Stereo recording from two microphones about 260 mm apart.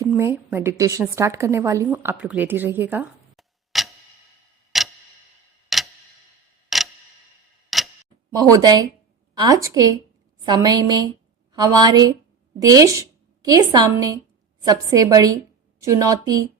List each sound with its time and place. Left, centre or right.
0.0 s a woman's voice: centre
4.7 s tick-tock: centre
6.7 s clock: centre
7.7 s tick-tock: centre
8.3 s a woman's voice: centre